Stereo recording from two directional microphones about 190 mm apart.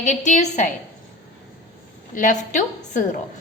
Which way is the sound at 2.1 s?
45° left (ahead or behind).